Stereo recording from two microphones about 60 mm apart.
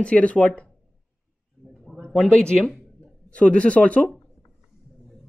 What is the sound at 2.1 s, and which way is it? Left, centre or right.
Speech, centre.